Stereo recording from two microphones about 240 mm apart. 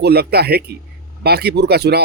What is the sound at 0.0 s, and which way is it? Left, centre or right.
Speech, right.